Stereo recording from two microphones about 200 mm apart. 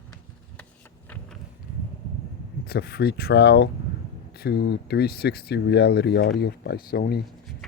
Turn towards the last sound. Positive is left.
turn(degrees=50)  # may be behind; listen again after turning